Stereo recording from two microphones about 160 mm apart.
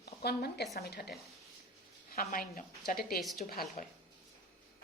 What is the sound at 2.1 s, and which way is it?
A woman's voice, 60° left (ahead or behind).